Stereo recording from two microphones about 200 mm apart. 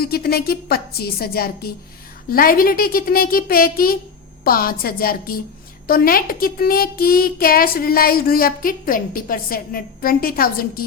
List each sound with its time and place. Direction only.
0.0 s a child's voice: 50° left (ahead or behind)